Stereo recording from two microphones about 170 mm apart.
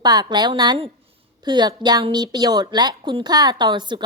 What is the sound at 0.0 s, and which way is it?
A woman's voice, 25° right (ahead or behind).